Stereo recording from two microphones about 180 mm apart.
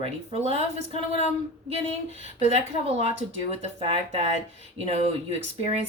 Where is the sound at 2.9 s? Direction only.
35° right (ahead or behind).